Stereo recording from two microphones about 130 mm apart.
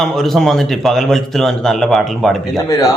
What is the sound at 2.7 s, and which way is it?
Speech, 25° left (ahead or behind).